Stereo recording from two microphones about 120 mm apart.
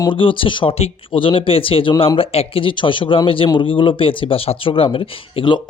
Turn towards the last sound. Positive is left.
turn(degrees=45)  # may be behind; listen again after turning